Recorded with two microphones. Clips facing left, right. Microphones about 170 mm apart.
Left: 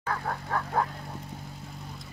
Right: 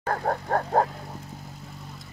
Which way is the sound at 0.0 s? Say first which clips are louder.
Right 6 dB; 45° right (ahead or behind).